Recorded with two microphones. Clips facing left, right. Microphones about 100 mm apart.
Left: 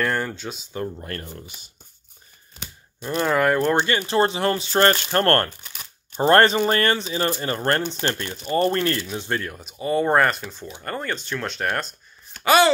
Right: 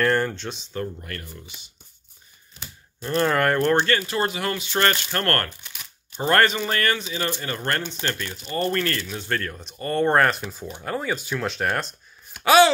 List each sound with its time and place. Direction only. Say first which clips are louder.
0.0 s speech: right 3 dB; centre (ahead or behind)
0.9 s speech: left 4 dB; 35° left (ahead or behind)
3.0 s speech: even; 5° left (ahead or behind)
3.8 s speech: left 1 dB; 20° left (ahead or behind)
4.2 s speech: left 5 dB; 30° left (ahead or behind); by 12.7 s centre (ahead or behind)